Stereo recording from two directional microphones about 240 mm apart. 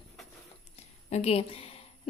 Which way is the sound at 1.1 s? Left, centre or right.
Left.